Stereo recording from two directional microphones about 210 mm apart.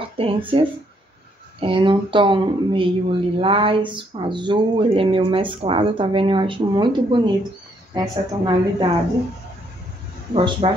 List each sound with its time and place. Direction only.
0.2 s speech: 25° right (ahead or behind)
1.6 s speech: 25° right (ahead or behind)
10.3 s speech: 25° right (ahead or behind)